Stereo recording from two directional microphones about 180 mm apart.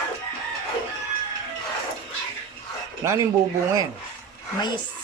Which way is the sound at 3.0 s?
15° right (ahead or behind).